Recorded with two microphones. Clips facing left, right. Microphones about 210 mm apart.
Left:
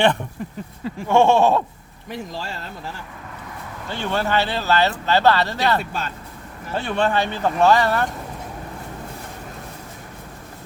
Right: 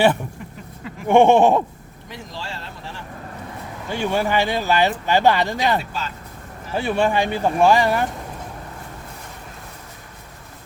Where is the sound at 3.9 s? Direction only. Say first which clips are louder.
Right 2 dB; 10° right (ahead or behind).